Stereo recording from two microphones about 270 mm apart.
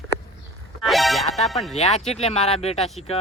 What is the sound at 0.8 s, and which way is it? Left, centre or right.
Speech, centre.